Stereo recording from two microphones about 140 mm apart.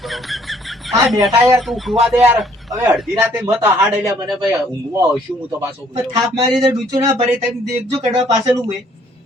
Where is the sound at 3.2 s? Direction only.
10° right (ahead or behind).